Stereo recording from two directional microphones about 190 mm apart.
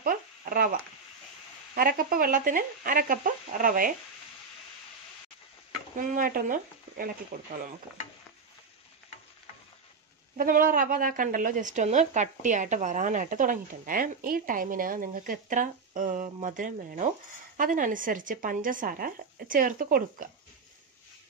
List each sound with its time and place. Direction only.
0.0 s a sound: 45° right (ahead or behind)
1.8 s speech: 50° right (ahead or behind)
5.9 s speech: 45° right (ahead or behind)
10.3 s speech: 45° right (ahead or behind)